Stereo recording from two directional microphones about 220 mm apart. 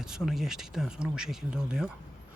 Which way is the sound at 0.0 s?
Centre (ahead or behind).